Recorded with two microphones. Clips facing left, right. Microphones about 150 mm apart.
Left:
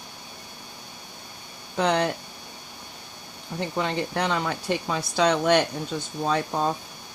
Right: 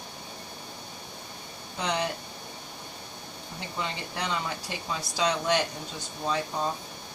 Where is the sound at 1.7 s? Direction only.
60° left (ahead or behind).